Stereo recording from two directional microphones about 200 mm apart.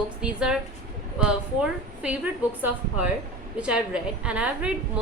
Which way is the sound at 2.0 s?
5° right (ahead or behind).